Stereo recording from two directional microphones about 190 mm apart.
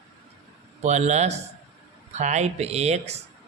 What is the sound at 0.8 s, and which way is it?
A man's voice, 35° right (ahead or behind).